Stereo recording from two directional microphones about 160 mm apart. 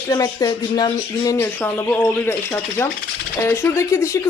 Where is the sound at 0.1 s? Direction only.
25° left (ahead or behind).